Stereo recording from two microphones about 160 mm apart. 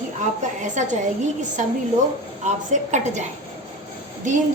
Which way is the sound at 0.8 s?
50° right (ahead or behind).